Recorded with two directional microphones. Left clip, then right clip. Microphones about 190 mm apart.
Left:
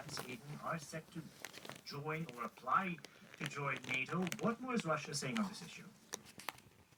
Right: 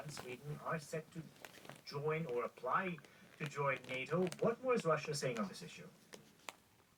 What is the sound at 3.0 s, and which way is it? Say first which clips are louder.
Speech: left 2 dB; 40° left (ahead or behind).